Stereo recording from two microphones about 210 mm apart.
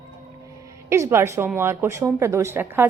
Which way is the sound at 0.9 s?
10° right (ahead or behind).